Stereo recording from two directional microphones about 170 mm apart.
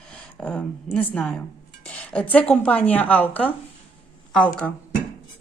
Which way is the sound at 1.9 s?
5° left (ahead or behind).